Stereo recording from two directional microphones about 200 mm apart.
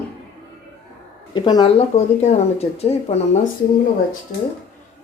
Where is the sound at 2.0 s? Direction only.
35° left (ahead or behind).